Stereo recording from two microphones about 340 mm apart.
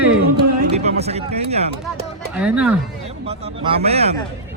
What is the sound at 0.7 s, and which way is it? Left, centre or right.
Speech, centre.